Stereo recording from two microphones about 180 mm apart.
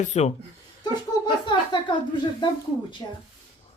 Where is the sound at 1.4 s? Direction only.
25° left (ahead or behind).